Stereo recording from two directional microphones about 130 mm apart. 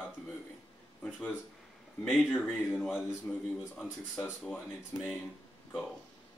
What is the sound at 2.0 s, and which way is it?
Speech, 10° left (ahead or behind).